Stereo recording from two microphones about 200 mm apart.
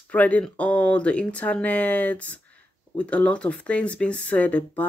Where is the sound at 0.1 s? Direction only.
5° left (ahead or behind).